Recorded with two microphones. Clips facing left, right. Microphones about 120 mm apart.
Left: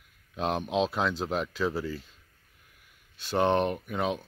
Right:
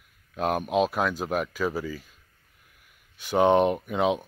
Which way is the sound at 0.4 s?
10° right (ahead or behind).